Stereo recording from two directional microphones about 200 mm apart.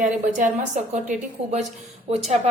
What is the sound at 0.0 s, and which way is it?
A woman's voice, 40° right (ahead or behind).